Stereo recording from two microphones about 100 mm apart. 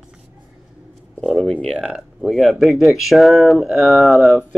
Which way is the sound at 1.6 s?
5° right (ahead or behind).